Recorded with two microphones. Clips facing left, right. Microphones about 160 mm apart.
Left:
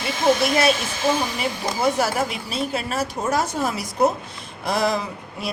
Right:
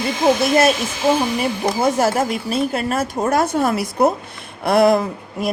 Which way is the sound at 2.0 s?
50° right (ahead or behind).